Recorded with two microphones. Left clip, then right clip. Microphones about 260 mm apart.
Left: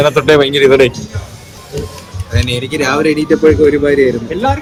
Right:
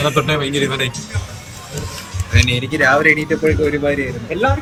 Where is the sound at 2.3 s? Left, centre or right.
Left.